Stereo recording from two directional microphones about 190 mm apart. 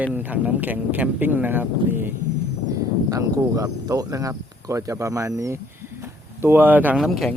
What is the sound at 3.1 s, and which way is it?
Speech, 20° right (ahead or behind).